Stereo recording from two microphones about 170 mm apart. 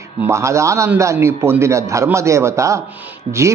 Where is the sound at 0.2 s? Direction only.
15° right (ahead or behind).